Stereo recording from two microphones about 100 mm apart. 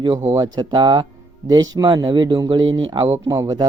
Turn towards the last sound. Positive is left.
turn(degrees=-40)  # may be behind; listen again after turning